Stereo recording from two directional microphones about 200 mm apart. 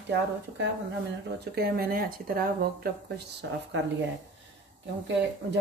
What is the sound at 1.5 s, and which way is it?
Speech, 50° right (ahead or behind).